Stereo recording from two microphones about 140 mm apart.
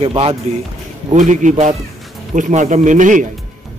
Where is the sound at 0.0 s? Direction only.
45° right (ahead or behind).